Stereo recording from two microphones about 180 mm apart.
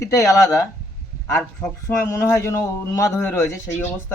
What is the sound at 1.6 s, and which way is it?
Speech, 15° left (ahead or behind).